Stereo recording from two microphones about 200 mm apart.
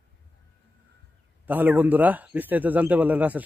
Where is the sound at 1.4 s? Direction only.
10° right (ahead or behind).